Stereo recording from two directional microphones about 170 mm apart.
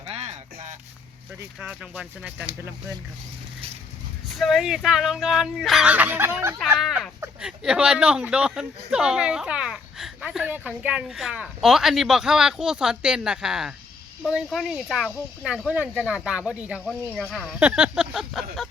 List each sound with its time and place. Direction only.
0.0 s music: 40° right (ahead or behind)
1.5 s speech: 5° right (ahead or behind)
4.3 s speech: centre (ahead or behind)
6.7 s speech: centre (ahead or behind)